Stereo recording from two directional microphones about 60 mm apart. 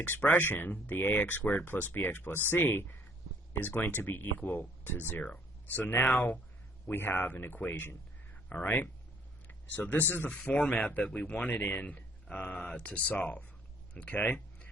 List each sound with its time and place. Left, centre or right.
0.0 s speech: left
10.2 s speech: left